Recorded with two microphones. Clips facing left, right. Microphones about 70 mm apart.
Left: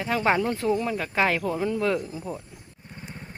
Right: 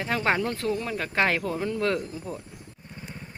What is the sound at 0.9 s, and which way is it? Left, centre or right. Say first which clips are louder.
Speech: left 1 dB; centre.